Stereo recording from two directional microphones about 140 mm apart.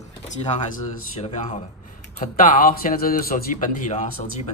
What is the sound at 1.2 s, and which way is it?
Speech, 55° left (ahead or behind).